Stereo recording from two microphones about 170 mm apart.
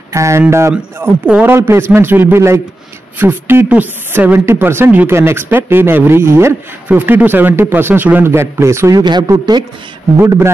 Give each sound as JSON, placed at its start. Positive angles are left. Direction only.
{"t": 0.1, "sound": "speech", "side_deg": -15}